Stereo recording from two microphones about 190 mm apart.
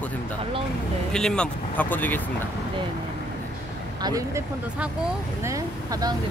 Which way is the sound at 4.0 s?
20° right (ahead or behind).